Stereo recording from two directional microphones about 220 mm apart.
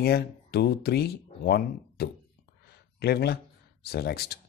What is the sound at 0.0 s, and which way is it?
Speech, 45° left (ahead or behind).